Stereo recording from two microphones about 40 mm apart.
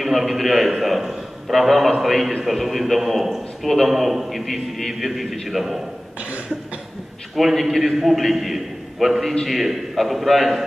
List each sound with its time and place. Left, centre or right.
0.0 s a man's voice: centre
6.1 s cough: right
7.3 s a man's voice: centre